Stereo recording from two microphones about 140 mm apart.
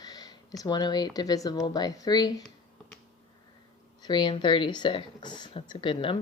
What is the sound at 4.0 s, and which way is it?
A woman's voice, 30° left (ahead or behind).